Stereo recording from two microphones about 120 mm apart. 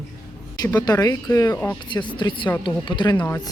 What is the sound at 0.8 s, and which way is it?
A woman's voice, 35° left (ahead or behind).